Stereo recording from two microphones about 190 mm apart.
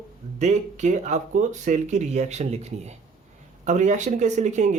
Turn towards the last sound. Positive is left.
turn(degrees=-40)  # may be behind; listen again after turning